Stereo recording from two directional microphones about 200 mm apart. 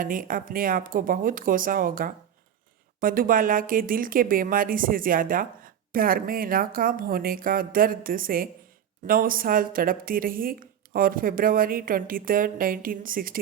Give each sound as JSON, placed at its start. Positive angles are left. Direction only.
{"t": 0.0, "sound": "speech", "side_deg": -40}